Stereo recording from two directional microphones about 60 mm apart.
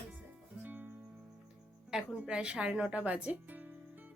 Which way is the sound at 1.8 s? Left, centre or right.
Centre.